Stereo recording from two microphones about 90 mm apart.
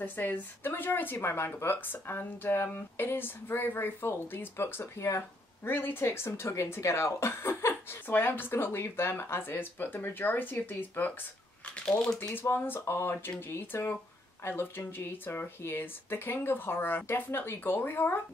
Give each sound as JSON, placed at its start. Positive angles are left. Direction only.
{"t": 0.0, "sound": "speech", "side_deg": 20}
{"t": 12.2, "sound": "speech", "side_deg": 25}